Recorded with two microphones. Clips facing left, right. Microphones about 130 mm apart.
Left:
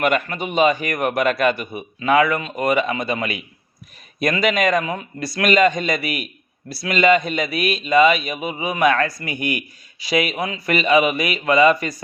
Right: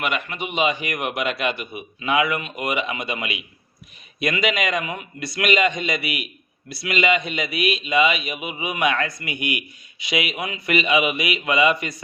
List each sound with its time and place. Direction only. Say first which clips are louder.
0.0 s a man's voice: left 6 dB; 45° left (ahead or behind)